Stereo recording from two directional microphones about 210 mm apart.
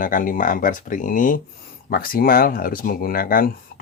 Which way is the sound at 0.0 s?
40° left (ahead or behind).